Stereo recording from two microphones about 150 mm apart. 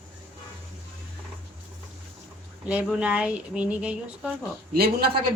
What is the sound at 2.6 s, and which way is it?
Speech, 10° right (ahead or behind).